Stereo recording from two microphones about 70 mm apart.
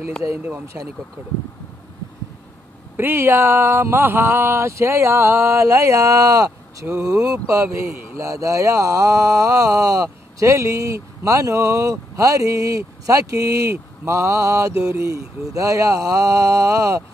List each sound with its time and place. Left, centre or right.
0.4 s speech: right
3.0 s speech: right